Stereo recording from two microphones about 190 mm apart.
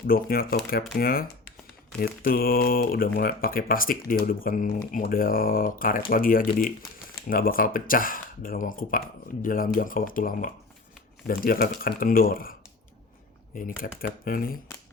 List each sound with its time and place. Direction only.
0.1 s speech: 50° left (ahead or behind)